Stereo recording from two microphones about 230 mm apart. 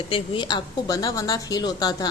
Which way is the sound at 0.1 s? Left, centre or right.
Centre.